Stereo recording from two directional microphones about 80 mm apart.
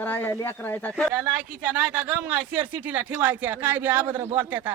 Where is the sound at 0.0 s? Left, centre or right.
Left.